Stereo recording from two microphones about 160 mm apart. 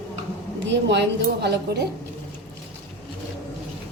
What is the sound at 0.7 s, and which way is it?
A woman's voice, 90° right.